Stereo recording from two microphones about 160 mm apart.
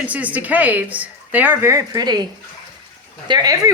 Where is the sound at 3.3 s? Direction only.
25° right (ahead or behind).